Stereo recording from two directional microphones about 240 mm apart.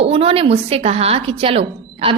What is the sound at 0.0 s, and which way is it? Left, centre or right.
A woman's voice, right.